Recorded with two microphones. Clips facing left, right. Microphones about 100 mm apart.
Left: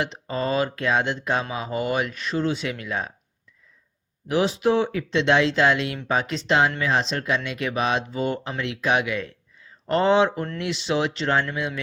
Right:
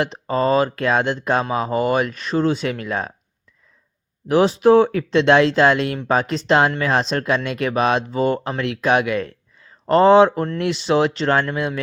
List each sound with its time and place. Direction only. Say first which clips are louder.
0.0 s speech: right 7 dB; 45° right (ahead or behind)
4.3 s speech: right 7 dB; 40° right (ahead or behind)